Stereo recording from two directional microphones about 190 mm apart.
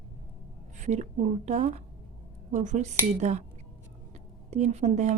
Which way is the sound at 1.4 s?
35° right (ahead or behind).